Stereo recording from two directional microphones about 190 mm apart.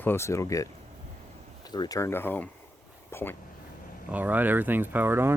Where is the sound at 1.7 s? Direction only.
20° left (ahead or behind).